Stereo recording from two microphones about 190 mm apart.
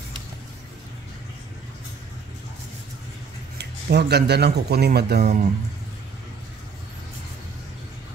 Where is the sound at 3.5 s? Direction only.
60° right (ahead or behind).